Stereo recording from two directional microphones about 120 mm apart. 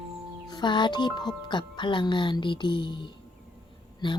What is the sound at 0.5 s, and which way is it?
Speech, 40° left (ahead or behind).